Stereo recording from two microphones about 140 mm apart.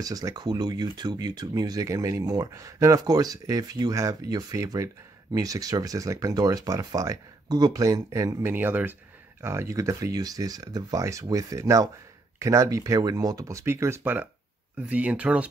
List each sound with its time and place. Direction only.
0.0 s speech: 25° right (ahead or behind); by 15.4 s 10° right (ahead or behind)